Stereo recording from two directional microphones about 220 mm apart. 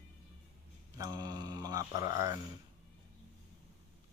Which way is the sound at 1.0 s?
15° right (ahead or behind).